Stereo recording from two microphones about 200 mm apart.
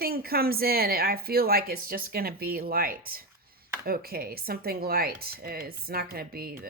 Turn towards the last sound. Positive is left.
turn(degrees=-50)  # may be behind; listen again after turning